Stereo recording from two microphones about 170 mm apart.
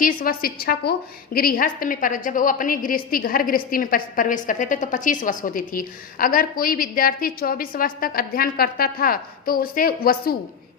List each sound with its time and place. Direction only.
0.0 s a woman's voice: 55° left (ahead or behind)